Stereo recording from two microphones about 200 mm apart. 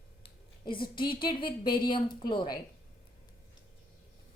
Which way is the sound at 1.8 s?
25° left (ahead or behind).